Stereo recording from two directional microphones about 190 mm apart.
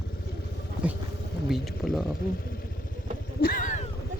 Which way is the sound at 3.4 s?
50° left (ahead or behind).